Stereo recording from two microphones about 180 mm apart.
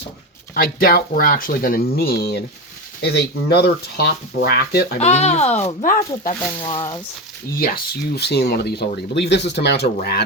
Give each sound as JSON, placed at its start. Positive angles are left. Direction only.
{"t": 0.5, "sound": "speech", "side_deg": 55}
{"t": 4.9, "sound": "speech", "side_deg": 35}
{"t": 6.6, "sound": "speech", "side_deg": 25}
{"t": 7.5, "sound": "speech", "side_deg": 55}